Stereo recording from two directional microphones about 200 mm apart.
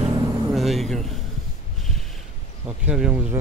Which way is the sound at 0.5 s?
Centre (ahead or behind).